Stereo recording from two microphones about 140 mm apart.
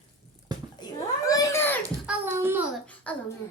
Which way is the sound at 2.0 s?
10° right (ahead or behind).